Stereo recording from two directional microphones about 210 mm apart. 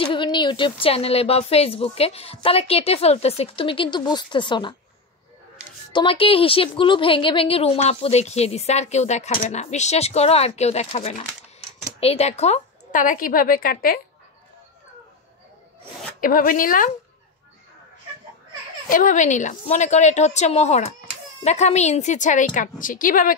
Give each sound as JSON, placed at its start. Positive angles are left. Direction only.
{"t": 0.0, "sound": "a woman's voice", "side_deg": 25}
{"t": 5.9, "sound": "a woman's voice", "side_deg": 25}
{"t": 16.2, "sound": "a woman's voice", "side_deg": 40}
{"t": 18.9, "sound": "a woman's voice", "side_deg": 40}